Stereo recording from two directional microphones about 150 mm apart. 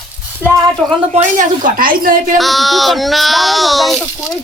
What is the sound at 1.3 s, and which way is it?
A woman's voice, 65° right (ahead or behind).